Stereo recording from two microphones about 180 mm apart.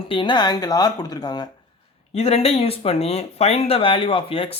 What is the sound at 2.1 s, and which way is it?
Speech, 35° left (ahead or behind).